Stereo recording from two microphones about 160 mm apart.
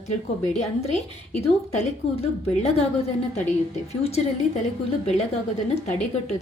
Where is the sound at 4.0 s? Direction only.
40° left (ahead or behind).